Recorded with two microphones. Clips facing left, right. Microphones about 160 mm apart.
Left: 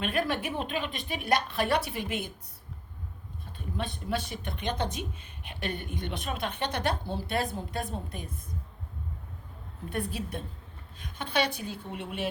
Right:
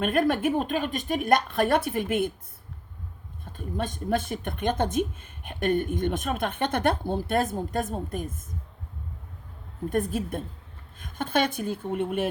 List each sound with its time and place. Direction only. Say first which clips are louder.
0.0 s speech: right 7 dB; 50° right (ahead or behind)
3.4 s speech: right 4 dB; 45° right (ahead or behind)
9.9 s speech: right 6 dB; 45° right (ahead or behind)